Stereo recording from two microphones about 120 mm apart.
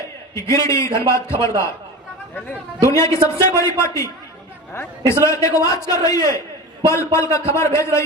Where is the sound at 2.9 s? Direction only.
25° left (ahead or behind).